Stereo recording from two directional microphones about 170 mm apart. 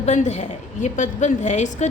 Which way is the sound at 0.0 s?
45° left (ahead or behind).